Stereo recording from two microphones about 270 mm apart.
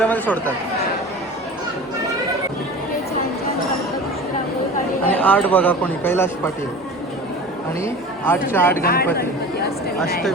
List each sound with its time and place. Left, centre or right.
0.0 s speech: centre
5.1 s speech: centre
7.9 s speech: centre
8.8 s speech: left